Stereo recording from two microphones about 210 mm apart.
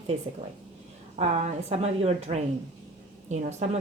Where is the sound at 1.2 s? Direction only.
30° right (ahead or behind).